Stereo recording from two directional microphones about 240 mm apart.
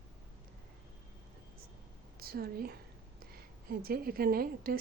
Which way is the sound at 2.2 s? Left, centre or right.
Right.